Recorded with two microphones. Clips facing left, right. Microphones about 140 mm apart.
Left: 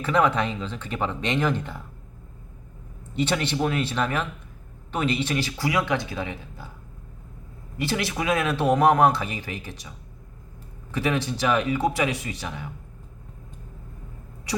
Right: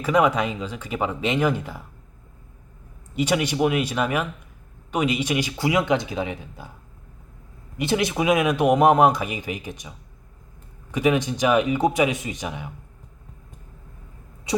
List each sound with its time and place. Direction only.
0.0 s speech: 10° right (ahead or behind)
3.2 s speech: 10° right (ahead or behind)
7.8 s speech: 20° right (ahead or behind)
10.9 s speech: 15° right (ahead or behind)